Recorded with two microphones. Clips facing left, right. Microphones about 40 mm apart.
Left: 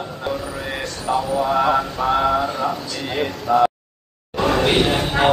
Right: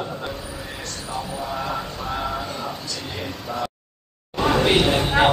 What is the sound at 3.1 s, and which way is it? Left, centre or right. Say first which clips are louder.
Speech: left 13 dB; left.